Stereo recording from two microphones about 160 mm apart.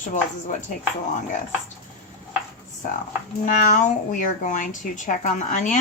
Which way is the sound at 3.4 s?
55° left (ahead or behind).